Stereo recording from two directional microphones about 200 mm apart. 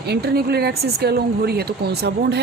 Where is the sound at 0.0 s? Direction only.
55° right (ahead or behind).